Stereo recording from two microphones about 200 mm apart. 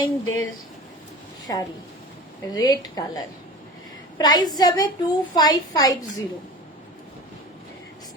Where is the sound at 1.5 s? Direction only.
15° left (ahead or behind).